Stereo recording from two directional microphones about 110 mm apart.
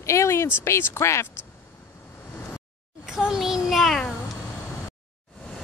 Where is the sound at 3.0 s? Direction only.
5° right (ahead or behind).